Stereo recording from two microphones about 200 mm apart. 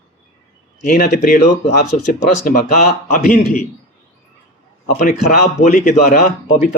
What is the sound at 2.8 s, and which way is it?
Speech, 40° left (ahead or behind).